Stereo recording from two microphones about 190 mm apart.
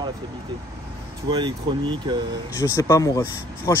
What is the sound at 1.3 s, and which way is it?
Speech, 25° right (ahead or behind).